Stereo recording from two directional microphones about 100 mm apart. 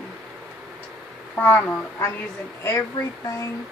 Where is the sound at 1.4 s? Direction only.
15° left (ahead or behind).